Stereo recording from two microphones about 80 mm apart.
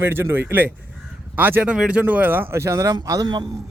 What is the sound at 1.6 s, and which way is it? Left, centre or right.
Speech, centre.